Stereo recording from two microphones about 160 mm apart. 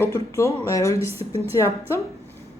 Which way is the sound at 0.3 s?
20° left (ahead or behind).